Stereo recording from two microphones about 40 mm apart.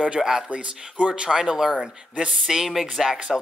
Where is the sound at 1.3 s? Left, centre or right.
Centre.